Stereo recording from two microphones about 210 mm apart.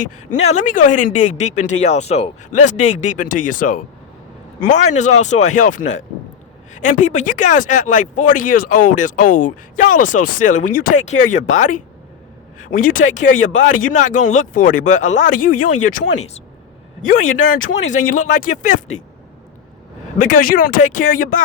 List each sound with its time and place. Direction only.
0.3 s speech: 35° left (ahead or behind)
20.1 s speech: 40° left (ahead or behind)